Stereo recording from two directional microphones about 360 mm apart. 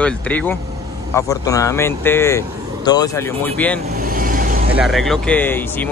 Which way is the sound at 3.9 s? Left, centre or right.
Right.